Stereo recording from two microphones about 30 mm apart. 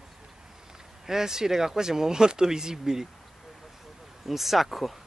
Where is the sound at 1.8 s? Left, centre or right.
Right.